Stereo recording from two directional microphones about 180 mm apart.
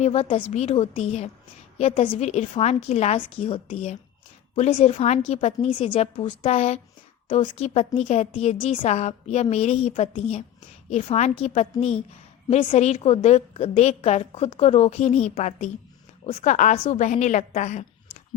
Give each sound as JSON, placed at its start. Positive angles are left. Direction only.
{"t": 0.0, "sound": "a woman's voice", "side_deg": 35}